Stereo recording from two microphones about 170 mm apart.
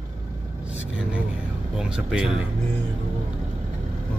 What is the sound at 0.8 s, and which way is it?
Vehicle, 10° right (ahead or behind).